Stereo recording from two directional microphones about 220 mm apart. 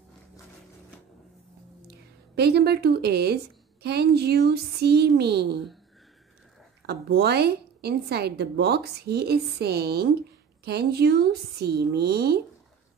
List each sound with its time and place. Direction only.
1.9 s a woman's voice: 50° right (ahead or behind)
6.9 s a woman's voice: 45° right (ahead or behind)